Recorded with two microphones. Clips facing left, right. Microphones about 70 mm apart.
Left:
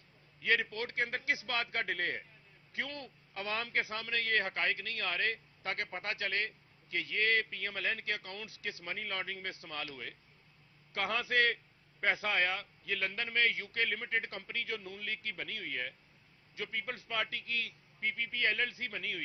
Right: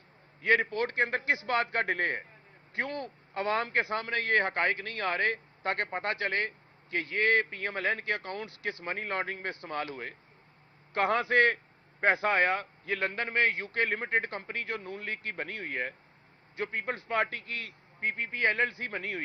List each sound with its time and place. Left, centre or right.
0.4 s a man's voice: right